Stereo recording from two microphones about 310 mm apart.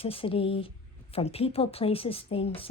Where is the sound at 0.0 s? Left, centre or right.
Centre.